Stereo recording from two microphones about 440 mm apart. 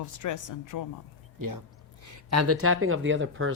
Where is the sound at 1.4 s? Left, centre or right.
Right.